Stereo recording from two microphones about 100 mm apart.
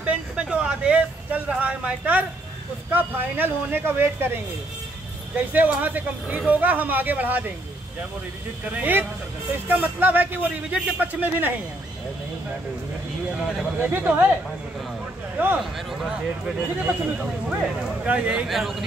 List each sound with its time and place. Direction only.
0.0 s speech: 10° right (ahead or behind)
8.7 s speech: 20° right (ahead or behind)
13.8 s speech: 20° right (ahead or behind)
15.3 s speech: 15° right (ahead or behind)
15.9 s speech: 5° right (ahead or behind)
18.5 s a man's voice: centre (ahead or behind)